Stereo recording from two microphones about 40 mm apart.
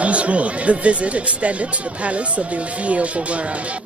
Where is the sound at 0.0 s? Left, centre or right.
Right.